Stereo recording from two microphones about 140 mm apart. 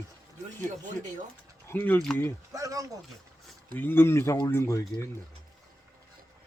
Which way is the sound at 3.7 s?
15° left (ahead or behind).